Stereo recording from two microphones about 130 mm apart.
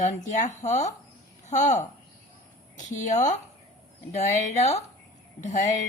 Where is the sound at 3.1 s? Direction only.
65° left (ahead or behind).